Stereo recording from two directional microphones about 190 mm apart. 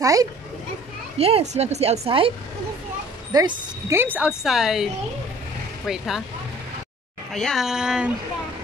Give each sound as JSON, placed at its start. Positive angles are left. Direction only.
{"t": 0.0, "sound": "a child's voice", "side_deg": -15}
{"t": 1.1, "sound": "speech", "side_deg": -30}
{"t": 3.3, "sound": "a woman's voice", "side_deg": -15}
{"t": 5.9, "sound": "speech", "side_deg": 0}
{"t": 7.3, "sound": "speech", "side_deg": 0}